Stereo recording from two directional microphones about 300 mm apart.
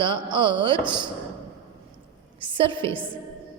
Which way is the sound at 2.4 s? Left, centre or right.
Centre.